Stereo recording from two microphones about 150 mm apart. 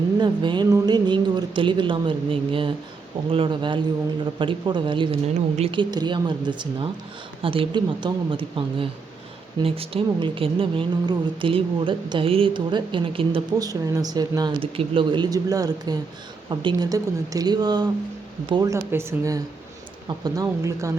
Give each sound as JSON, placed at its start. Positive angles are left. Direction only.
{"t": 0.2, "sound": "a woman's voice", "side_deg": -30}
{"t": 5.2, "sound": "a woman's voice", "side_deg": -45}
{"t": 13.6, "sound": "speech", "side_deg": -25}